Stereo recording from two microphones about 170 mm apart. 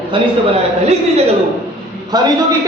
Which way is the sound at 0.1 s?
30° right (ahead or behind).